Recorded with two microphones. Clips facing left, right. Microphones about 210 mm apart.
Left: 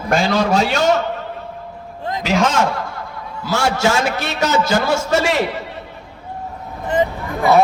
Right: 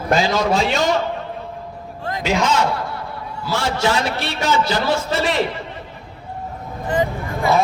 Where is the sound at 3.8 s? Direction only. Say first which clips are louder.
Left 2 dB; 45° left (ahead or behind).